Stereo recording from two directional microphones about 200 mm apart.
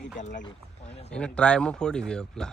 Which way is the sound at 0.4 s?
30° left (ahead or behind).